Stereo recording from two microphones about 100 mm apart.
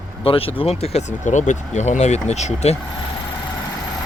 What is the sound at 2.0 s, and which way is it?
Speech, 90° left.